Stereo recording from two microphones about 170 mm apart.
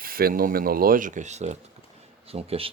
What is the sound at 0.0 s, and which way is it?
Mechanisms, 60° right (ahead or behind).